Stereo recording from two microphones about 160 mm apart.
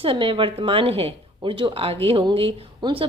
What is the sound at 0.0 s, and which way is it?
A woman's voice, 35° right (ahead or behind).